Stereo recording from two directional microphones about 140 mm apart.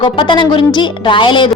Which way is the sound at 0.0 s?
35° left (ahead or behind).